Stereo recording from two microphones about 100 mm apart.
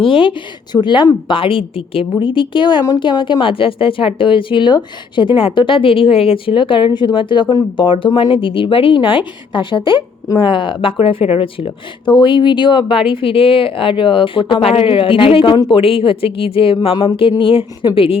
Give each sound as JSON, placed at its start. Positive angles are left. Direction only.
{"t": 0.0, "sound": "a woman's voice", "side_deg": 60}
{"t": 12.0, "sound": "a woman's voice", "side_deg": 50}